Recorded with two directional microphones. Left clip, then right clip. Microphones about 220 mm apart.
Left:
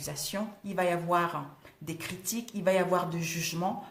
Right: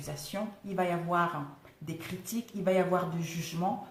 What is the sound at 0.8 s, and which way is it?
Speech, 45° left (ahead or behind).